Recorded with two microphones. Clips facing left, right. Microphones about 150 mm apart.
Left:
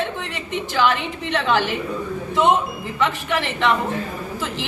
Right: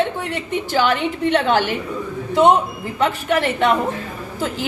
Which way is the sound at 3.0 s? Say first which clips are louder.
Right 4 dB; 45° right (ahead or behind).